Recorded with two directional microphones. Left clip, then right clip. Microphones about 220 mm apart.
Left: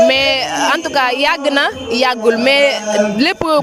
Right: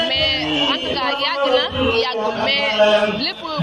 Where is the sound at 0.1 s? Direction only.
55° left (ahead or behind).